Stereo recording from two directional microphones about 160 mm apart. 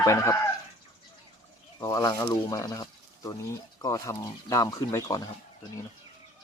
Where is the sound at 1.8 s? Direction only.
20° left (ahead or behind).